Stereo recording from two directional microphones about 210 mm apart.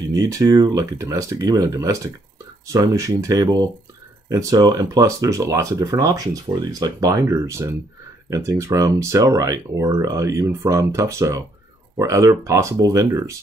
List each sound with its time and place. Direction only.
0.1 s speech: 15° right (ahead or behind)